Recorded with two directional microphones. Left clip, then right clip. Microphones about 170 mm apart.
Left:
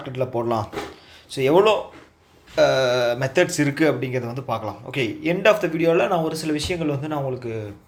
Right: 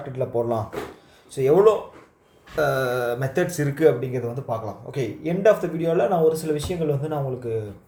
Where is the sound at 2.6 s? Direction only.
10° left (ahead or behind).